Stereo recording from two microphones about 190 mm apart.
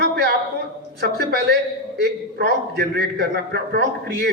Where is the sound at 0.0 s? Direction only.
60° right (ahead or behind).